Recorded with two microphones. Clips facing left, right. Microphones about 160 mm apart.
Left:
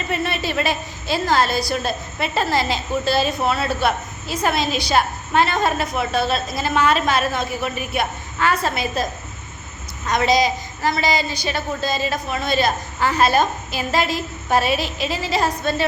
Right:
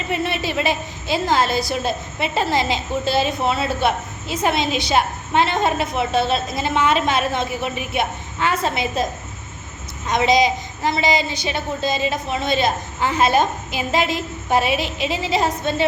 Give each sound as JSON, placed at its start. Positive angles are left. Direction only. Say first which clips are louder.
{"t": 0.1, "sound": "a woman's voice", "louder": "right 1 dB", "side_deg": -15}
{"t": 10.1, "sound": "a woman's voice", "louder": "right 1 dB", "side_deg": -20}